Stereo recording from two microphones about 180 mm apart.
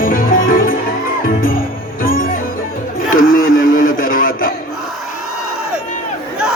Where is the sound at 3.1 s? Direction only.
50° left (ahead or behind).